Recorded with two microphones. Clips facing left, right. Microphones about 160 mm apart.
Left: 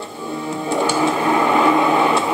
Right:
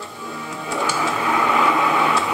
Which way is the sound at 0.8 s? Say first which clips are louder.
Left 4 dB; 25° left (ahead or behind).